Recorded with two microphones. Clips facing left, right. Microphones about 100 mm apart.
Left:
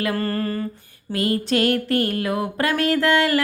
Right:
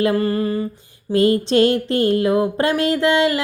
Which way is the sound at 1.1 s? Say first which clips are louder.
Right 6 dB; 25° right (ahead or behind).